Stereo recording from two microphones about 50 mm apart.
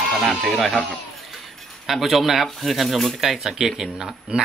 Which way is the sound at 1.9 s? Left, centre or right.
Centre.